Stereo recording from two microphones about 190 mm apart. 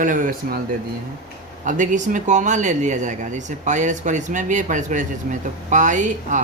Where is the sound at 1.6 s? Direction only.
40° right (ahead or behind).